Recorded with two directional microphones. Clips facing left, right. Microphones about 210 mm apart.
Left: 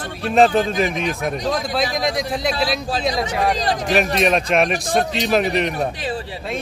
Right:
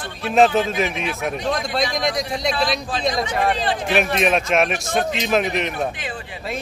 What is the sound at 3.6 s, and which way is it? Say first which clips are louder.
Speech: left 1 dB; 40° left (ahead or behind).